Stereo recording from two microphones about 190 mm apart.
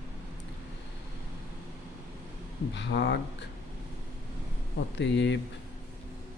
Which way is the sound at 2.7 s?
65° left (ahead or behind).